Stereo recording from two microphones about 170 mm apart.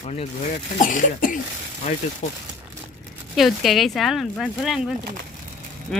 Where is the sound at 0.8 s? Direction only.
50° left (ahead or behind).